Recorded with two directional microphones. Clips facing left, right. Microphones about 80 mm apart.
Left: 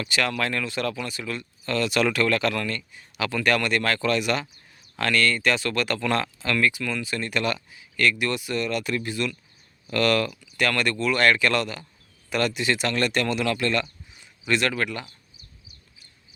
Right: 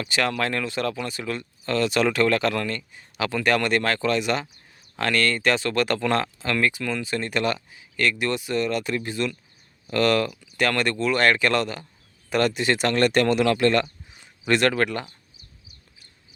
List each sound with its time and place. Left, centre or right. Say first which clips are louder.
0.0 s speech: right 1 dB; right